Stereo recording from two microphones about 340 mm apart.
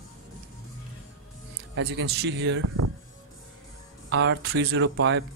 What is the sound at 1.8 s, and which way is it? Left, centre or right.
Speech, right.